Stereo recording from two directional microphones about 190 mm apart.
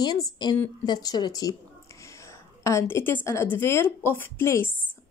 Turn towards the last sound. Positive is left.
turn(degrees=15)  # may be behind; listen again after turning